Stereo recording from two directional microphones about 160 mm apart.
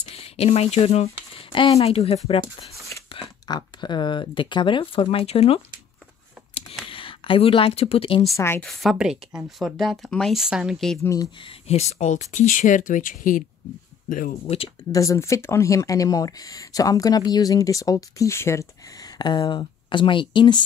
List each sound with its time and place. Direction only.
0.0 s speech: 40° left (ahead or behind)
1.3 s a sound: 30° left (ahead or behind)
1.8 s speech: 40° left (ahead or behind)
2.4 s speech: centre (ahead or behind)
3.1 s a sound: 35° left (ahead or behind)
3.4 s speech: 25° left (ahead or behind)
6.9 s speech: 35° left (ahead or behind)
8.4 s speech: 15° left (ahead or behind)
8.6 s speech: centre (ahead or behind)
11.4 s speech: 40° left (ahead or behind); by 14.4 s 60° left (ahead or behind)
14.4 s speech: 35° left (ahead or behind)
14.9 s speech: 20° left (ahead or behind)